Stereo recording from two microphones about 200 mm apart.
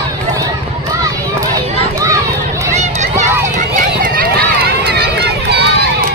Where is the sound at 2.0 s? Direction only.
15° right (ahead or behind).